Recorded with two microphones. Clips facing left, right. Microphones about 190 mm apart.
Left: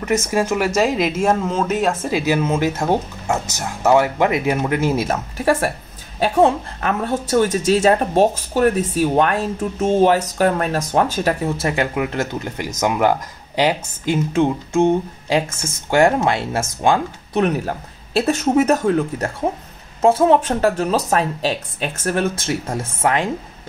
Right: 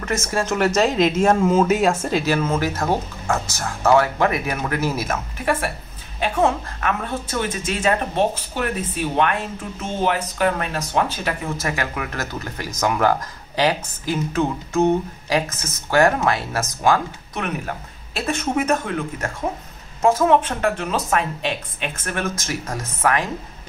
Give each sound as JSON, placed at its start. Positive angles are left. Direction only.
{"t": 0.0, "sound": "a woman's voice", "side_deg": 15}